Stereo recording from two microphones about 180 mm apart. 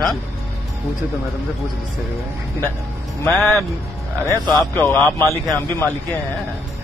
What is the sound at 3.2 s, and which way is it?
A man's voice, centre (ahead or behind).